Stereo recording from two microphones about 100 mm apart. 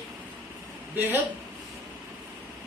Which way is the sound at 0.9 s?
20° right (ahead or behind).